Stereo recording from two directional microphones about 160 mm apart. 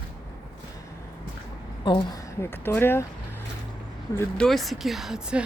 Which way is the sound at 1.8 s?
30° left (ahead or behind).